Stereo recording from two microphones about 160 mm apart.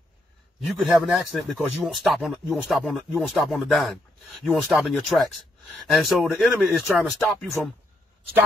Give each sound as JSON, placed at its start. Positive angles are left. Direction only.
{"t": 0.7, "sound": "speech", "side_deg": 0}